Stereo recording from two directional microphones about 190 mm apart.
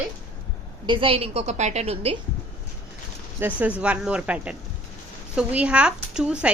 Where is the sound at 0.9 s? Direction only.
25° right (ahead or behind).